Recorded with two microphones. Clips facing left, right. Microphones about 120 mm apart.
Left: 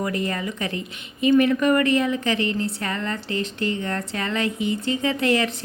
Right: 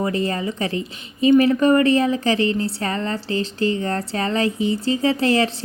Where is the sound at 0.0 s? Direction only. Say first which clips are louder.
Right 4 dB; 30° right (ahead or behind).